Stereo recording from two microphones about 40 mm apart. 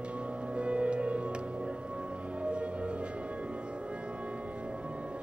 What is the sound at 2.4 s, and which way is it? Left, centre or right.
Music, right.